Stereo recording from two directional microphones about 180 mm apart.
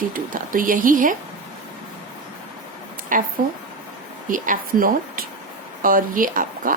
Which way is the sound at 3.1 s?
50° right (ahead or behind).